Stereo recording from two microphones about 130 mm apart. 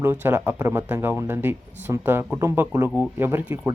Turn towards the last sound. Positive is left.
turn(degrees=-15)  # may be behind; listen again after turning